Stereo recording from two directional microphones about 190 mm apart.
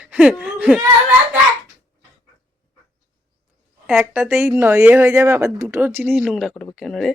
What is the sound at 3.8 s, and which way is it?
Speech, 5° right (ahead or behind).